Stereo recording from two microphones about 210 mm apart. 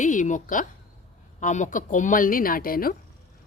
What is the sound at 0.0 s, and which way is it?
Speech, 35° left (ahead or behind).